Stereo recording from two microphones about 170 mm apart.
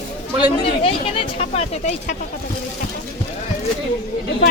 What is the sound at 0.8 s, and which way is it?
Speech, 35° left (ahead or behind).